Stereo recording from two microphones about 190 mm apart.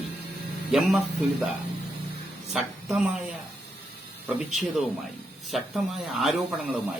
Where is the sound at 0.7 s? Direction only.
Centre (ahead or behind).